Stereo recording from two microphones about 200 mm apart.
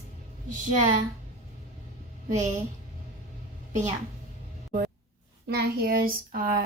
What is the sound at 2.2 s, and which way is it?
Speech, 40° right (ahead or behind).